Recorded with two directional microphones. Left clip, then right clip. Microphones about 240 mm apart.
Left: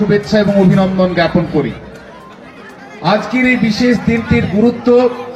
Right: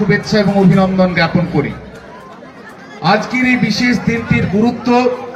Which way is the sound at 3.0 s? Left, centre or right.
Right.